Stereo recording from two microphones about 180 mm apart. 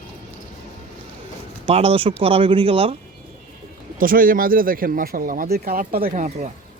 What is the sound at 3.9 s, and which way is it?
Speech, 50° right (ahead or behind).